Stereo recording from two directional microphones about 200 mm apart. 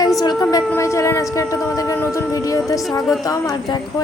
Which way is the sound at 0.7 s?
15° left (ahead or behind).